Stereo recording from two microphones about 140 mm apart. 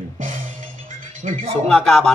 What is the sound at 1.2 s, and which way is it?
Speech, 55° right (ahead or behind).